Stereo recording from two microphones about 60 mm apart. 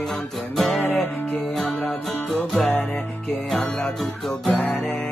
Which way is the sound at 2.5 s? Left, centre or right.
Centre.